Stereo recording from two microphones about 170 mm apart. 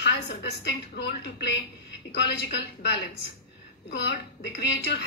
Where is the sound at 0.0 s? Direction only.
80° left.